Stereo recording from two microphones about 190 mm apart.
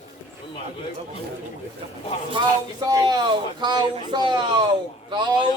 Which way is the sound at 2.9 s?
20° right (ahead or behind).